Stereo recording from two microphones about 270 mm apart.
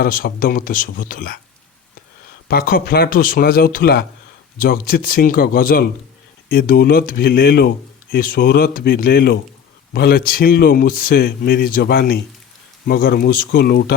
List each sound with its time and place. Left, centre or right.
0.0 s speech: left
2.5 s speech: left